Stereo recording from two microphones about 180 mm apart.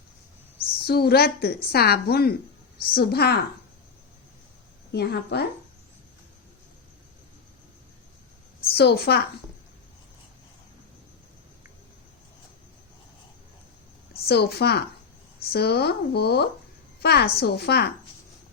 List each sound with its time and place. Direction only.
0.8 s speech: 60° left (ahead or behind)
4.9 s speech: 65° left (ahead or behind)
8.7 s speech: 60° left (ahead or behind)
14.1 s a woman's voice: 60° left (ahead or behind)